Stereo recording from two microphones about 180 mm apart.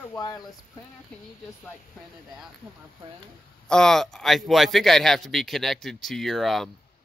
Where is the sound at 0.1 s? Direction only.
20° left (ahead or behind).